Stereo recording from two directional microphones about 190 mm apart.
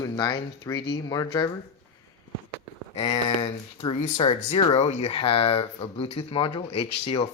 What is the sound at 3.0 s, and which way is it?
Speech, 20° left (ahead or behind).